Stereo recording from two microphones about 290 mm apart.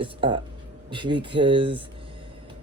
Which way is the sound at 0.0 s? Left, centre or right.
Centre.